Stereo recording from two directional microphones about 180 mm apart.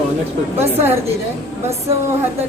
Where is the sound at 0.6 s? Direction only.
15° right (ahead or behind).